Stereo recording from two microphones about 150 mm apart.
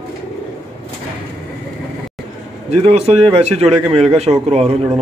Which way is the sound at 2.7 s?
45° right (ahead or behind).